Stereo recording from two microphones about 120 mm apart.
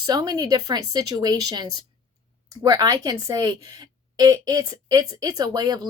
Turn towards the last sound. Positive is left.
turn(degrees=-35)  # may be behind; listen again after turning